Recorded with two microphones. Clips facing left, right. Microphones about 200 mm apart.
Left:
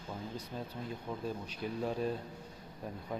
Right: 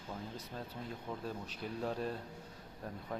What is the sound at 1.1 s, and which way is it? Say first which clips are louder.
Speech: left 3 dB; centre (ahead or behind).